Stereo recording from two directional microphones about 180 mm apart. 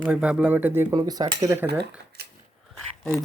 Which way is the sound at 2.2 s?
65° right (ahead or behind).